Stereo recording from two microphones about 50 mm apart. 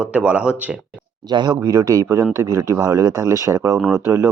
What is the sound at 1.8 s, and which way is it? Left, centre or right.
Speech, right.